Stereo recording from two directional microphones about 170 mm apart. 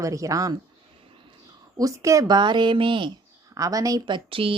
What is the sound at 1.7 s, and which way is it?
Speech, 20° right (ahead or behind).